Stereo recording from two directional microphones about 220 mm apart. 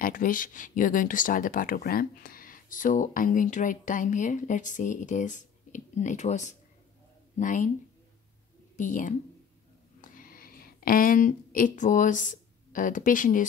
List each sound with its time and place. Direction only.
0.0 s speech: 40° left (ahead or behind)
8.7 s speech: 35° left (ahead or behind)